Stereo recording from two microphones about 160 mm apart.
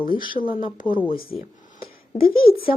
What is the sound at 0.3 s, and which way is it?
Speech, 60° left (ahead or behind).